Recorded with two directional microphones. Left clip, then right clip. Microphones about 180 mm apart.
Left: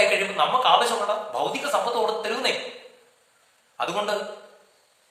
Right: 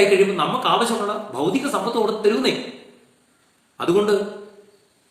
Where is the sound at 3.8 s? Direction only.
10° left (ahead or behind).